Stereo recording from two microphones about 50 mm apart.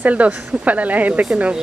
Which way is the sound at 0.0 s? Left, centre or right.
Right.